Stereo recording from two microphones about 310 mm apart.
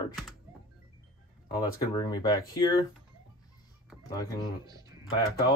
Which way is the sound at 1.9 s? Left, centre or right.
Centre.